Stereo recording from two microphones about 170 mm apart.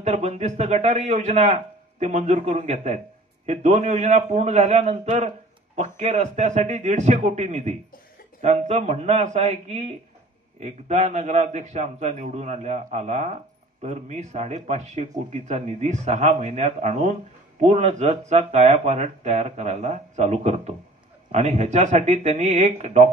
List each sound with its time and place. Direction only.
0.0 s speech: 40° right (ahead or behind)